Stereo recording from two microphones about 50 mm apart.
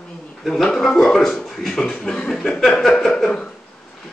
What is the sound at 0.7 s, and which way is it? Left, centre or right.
Speech, centre.